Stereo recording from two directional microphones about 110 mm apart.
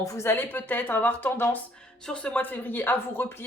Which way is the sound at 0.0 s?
25° left (ahead or behind).